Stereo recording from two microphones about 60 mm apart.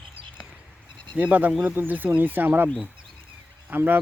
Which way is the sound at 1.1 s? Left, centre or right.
Right.